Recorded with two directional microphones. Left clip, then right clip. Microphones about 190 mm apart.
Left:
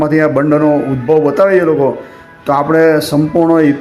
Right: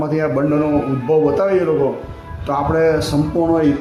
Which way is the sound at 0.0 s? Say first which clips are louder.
Left 7 dB; 15° left (ahead or behind).